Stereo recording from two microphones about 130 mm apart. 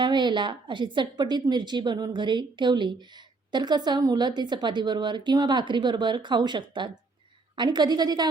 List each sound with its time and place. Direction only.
0.0 s a woman's voice: 35° right (ahead or behind)